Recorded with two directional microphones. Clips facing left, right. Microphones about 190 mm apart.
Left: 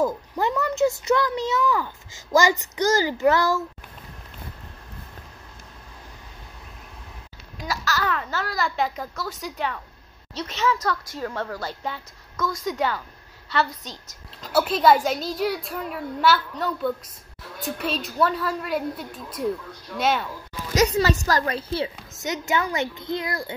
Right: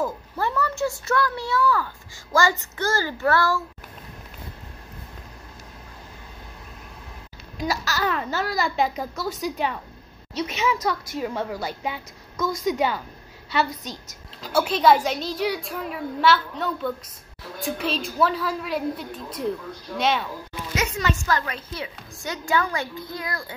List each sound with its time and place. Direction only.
0.0 s a child's voice: 15° left (ahead or behind)
7.6 s a woman's voice: 20° right (ahead or behind)
14.4 s a child's voice: centre (ahead or behind)
20.7 s a woman's voice: 35° left (ahead or behind)